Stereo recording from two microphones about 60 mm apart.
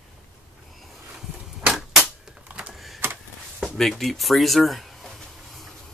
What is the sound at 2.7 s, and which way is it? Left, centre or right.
Typewriter, centre.